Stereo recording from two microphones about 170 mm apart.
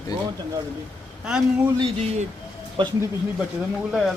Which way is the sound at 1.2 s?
5° right (ahead or behind).